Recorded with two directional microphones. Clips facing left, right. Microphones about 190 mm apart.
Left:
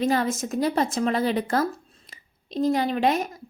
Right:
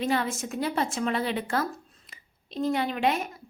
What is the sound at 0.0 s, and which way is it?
Speech, 40° left (ahead or behind).